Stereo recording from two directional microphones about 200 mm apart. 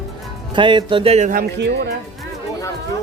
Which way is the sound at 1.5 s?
55° right (ahead or behind).